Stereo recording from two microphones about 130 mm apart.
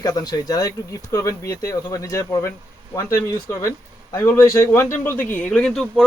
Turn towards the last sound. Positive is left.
turn(degrees=5)  # may be behind; listen again after turning